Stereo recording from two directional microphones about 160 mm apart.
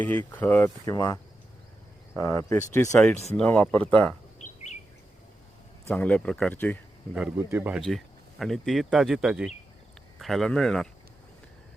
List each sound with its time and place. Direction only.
0.0 s speech: 10° left (ahead or behind)
5.9 s speech: 10° left (ahead or behind)
7.2 s speech: 10° right (ahead or behind)
7.9 s speech: centre (ahead or behind)